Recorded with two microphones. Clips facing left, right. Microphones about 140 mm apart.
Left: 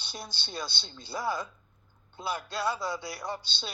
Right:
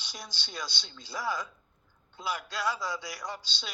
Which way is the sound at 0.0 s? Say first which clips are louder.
Left 3 dB; 30° left (ahead or behind).